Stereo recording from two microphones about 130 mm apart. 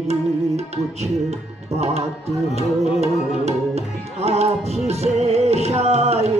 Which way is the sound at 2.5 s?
55° right (ahead or behind).